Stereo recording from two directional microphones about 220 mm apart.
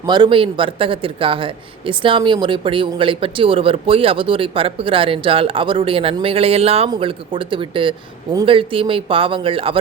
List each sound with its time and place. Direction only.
0.0 s a man's voice: 20° right (ahead or behind)